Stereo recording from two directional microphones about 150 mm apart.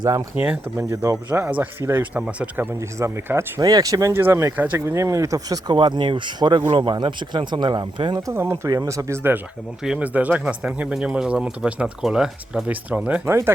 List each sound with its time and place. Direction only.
0.0 s speech: 25° right (ahead or behind)
0.3 s speech: 10° right (ahead or behind)
1.3 s speech: 10° right (ahead or behind); by 8.2 s 30° right (ahead or behind)
8.3 s speech: 15° right (ahead or behind)